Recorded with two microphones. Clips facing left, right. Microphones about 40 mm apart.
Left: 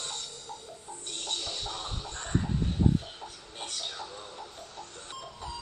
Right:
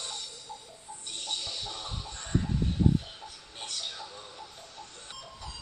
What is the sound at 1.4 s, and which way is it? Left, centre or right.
Music, left.